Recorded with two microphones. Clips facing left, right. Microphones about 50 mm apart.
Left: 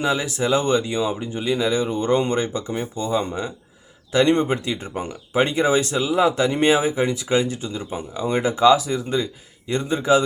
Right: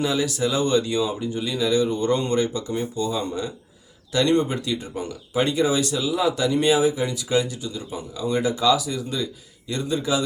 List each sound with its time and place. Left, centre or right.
0.0 s speech: left